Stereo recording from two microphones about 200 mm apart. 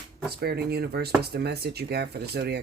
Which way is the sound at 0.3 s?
55° right (ahead or behind).